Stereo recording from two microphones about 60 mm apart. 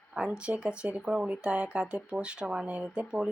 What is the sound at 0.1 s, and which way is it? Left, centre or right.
Speech, centre.